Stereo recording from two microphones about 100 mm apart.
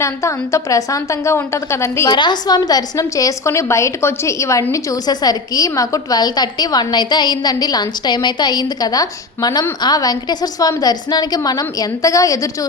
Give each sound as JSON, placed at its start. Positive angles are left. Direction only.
{"t": 0.0, "sound": "a woman's voice", "side_deg": 30}
{"t": 2.0, "sound": "a woman's voice", "side_deg": 50}